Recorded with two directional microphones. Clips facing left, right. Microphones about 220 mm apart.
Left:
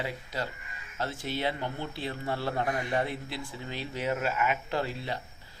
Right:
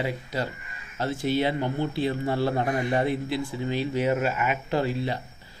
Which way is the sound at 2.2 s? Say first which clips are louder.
Right 6 dB; 25° right (ahead or behind).